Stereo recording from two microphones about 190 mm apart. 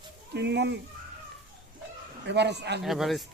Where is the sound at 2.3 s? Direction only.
65° right (ahead or behind).